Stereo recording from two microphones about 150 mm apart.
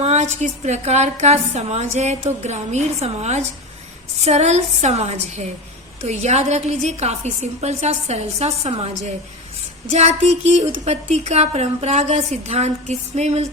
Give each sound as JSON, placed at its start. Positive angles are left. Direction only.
{"t": 0.0, "sound": "a woman's voice", "side_deg": -50}